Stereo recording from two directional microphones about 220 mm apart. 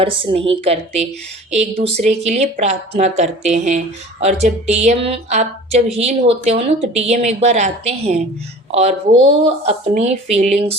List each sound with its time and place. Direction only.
0.0 s a woman's voice: 25° right (ahead or behind)